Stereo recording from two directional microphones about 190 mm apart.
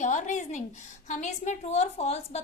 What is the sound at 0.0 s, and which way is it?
A woman's voice, 40° left (ahead or behind).